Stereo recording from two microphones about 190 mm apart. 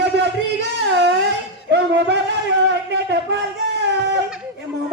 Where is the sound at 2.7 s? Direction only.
65° right (ahead or behind).